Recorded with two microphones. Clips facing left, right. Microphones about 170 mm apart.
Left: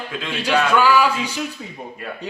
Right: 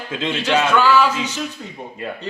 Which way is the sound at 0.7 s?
10° left (ahead or behind).